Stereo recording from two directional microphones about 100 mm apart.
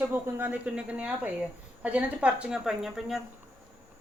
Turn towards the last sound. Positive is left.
turn(degrees=-5)  # may be behind; listen again after turning